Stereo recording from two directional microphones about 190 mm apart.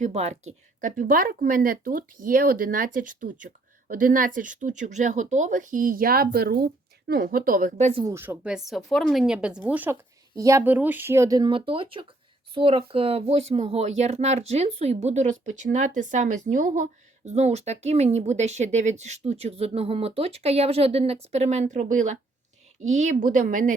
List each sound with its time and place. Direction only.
0.0 s a woman's voice: 35° right (ahead or behind)
8.0 s a woman's voice: 10° right (ahead or behind); by 23.7 s 40° right (ahead or behind)